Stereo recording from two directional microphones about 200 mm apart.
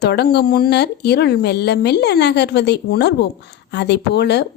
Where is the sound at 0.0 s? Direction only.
55° left (ahead or behind).